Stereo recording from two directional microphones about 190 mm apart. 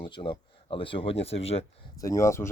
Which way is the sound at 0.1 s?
25° left (ahead or behind).